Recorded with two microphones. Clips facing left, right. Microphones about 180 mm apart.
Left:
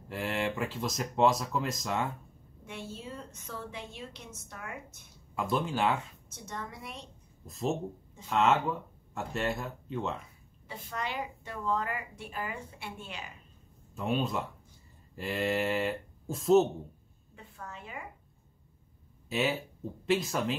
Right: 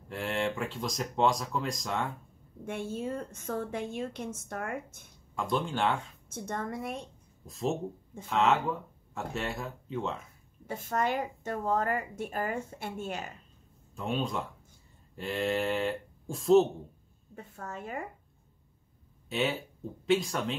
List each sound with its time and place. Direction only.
0.1 s speech: centre (ahead or behind)
2.6 s a woman's voice: 50° right (ahead or behind)
5.3 s speech: 5° left (ahead or behind)
6.2 s a woman's voice: 50° right (ahead or behind)
7.4 s speech: centre (ahead or behind)
10.7 s a woman's voice: 45° right (ahead or behind)
13.9 s speech: 5° left (ahead or behind)
17.4 s a woman's voice: 45° right (ahead or behind)
19.2 s speech: centre (ahead or behind)